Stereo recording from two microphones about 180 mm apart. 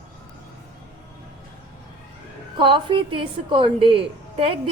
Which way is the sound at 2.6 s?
25° right (ahead or behind).